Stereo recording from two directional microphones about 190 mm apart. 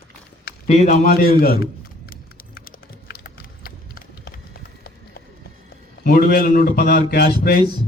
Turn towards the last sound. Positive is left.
turn(degrees=55)  # may be behind; listen again after turning